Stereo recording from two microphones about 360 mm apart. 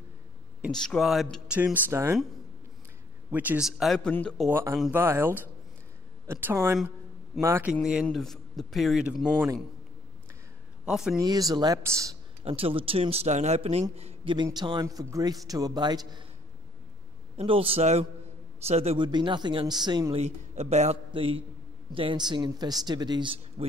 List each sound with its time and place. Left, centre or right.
0.6 s speech: centre
3.3 s a man's voice: centre
10.9 s a man's voice: centre
17.4 s a man's voice: centre